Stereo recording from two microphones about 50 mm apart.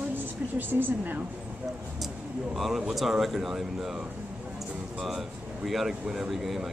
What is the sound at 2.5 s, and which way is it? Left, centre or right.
Speech, centre.